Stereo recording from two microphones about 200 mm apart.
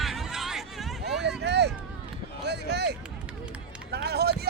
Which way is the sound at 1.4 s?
55° right (ahead or behind).